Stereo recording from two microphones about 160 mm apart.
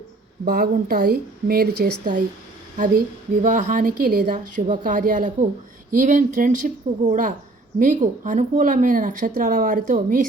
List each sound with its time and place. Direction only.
0.4 s a woman's voice: 70° right (ahead or behind)
3.4 s a woman's voice: 55° right (ahead or behind)